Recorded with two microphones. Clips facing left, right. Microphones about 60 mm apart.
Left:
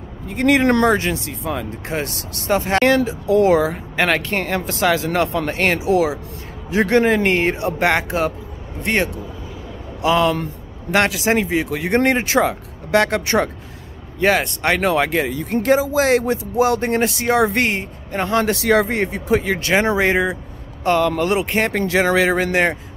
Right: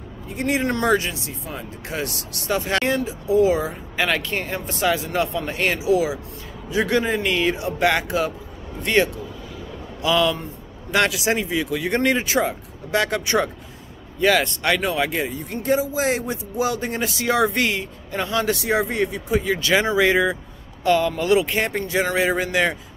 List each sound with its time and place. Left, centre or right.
0.3 s speech: left
0.8 s speech: left
1.9 s speech: left
2.8 s speech: left
14.2 s speech: left
14.9 s speech: left
15.6 s speech: left
18.6 s speech: left
20.8 s speech: left
21.7 s speech: left